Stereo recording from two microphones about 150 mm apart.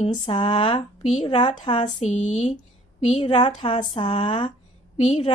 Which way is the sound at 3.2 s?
35° left (ahead or behind).